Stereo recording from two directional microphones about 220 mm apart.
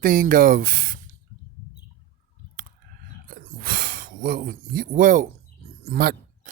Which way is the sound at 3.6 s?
40° right (ahead or behind).